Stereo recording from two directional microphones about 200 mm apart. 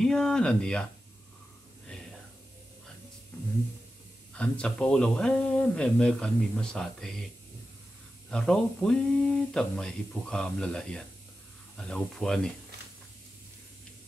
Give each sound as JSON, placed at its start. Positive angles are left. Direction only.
{"t": 0.0, "sound": "speech", "side_deg": 5}
{"t": 4.3, "sound": "speech", "side_deg": 5}
{"t": 8.3, "sound": "speech", "side_deg": 5}